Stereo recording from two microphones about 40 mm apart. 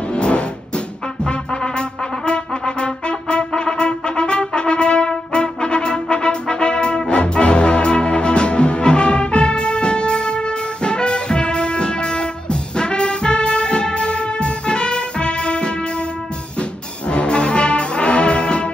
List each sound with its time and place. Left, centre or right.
0.1 s music: left
17.1 s music: left